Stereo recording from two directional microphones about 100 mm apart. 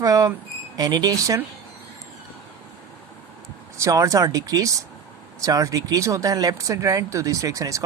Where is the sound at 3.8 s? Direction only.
35° right (ahead or behind).